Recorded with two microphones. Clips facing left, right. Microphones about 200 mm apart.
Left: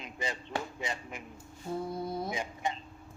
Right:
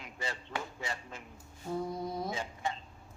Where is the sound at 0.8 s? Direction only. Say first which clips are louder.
Left 3 dB; 15° left (ahead or behind).